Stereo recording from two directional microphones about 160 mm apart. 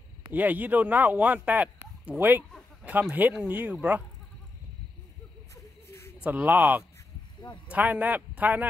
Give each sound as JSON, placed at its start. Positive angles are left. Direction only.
{"t": 0.3, "sound": "speech", "side_deg": -10}
{"t": 5.5, "sound": "a sound", "side_deg": 15}
{"t": 6.2, "sound": "speech", "side_deg": -10}